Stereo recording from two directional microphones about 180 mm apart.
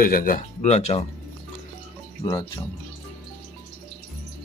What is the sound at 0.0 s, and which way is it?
Speech, 50° left (ahead or behind).